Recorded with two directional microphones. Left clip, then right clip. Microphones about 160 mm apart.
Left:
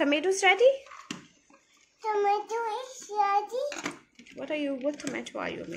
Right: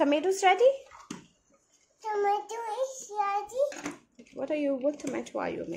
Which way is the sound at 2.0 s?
30° right (ahead or behind).